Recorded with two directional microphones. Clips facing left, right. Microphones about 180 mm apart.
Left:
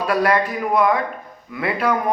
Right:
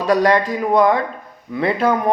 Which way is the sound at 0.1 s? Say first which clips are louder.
Right 4 dB; 25° right (ahead or behind).